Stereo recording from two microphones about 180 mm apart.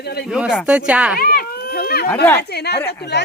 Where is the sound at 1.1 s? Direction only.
55° left (ahead or behind).